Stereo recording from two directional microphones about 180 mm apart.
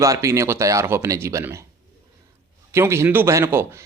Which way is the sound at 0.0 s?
15° right (ahead or behind).